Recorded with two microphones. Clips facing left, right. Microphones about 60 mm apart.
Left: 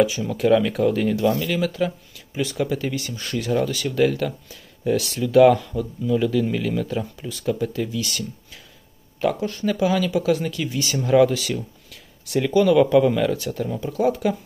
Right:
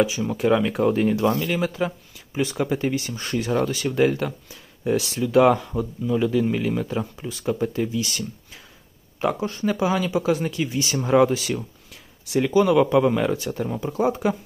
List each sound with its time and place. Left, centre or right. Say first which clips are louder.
0.0 s speech: left 2 dB; centre